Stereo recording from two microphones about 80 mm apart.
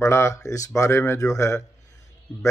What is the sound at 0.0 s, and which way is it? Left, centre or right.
Speech, left.